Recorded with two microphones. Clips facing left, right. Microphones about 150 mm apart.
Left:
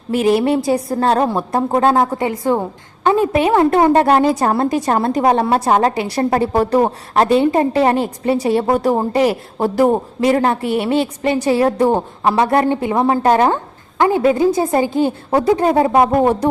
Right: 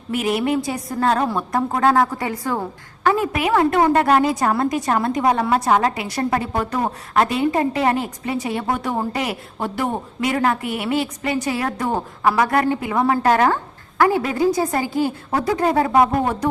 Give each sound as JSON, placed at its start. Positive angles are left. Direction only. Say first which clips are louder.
{"t": 0.1, "sound": "a woman's voice", "louder": "left 6 dB", "side_deg": 30}